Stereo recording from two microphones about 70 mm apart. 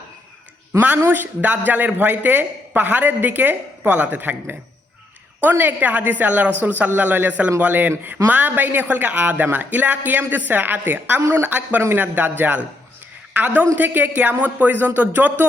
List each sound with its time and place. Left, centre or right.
0.7 s a man's voice: right